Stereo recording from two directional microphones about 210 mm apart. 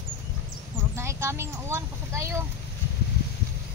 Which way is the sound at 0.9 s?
15° right (ahead or behind).